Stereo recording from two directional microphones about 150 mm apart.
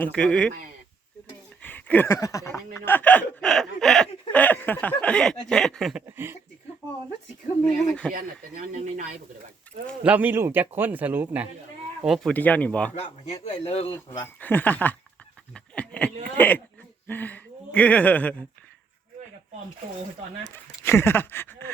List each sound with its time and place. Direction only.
0.0 s speech: 5° left (ahead or behind)
1.6 s a sound: 10° left (ahead or behind)
2.1 s speech: 20° left (ahead or behind)
2.7 s a sound: 15° left (ahead or behind)
6.1 s speech: 15° right (ahead or behind)
8.1 s speech: 60° right (ahead or behind)
10.0 s speech: 10° right (ahead or behind)
12.0 s speech: centre (ahead or behind)
12.3 s a sound: 10° left (ahead or behind)
13.7 s speech: 40° left (ahead or behind)
14.3 s a sound: 10° left (ahead or behind)
17.1 s speech: 10° left (ahead or behind)
20.5 s speech: 15° left (ahead or behind)